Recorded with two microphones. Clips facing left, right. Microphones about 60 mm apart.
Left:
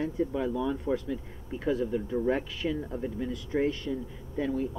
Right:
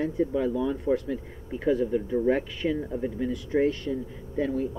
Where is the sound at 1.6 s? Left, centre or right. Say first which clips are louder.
Right 4 dB; centre.